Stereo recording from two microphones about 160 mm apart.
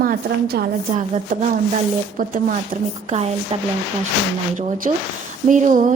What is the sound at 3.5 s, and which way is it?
Speech, 40° right (ahead or behind).